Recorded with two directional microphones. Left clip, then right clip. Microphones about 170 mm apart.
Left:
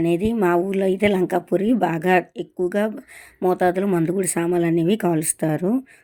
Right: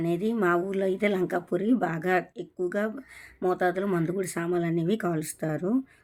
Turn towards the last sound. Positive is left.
turn(degrees=35)  # may be behind; listen again after turning